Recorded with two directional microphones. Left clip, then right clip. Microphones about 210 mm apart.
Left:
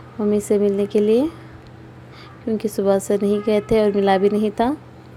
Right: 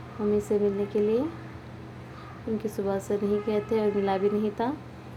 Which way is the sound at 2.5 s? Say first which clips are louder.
Left 11 dB; 35° left (ahead or behind).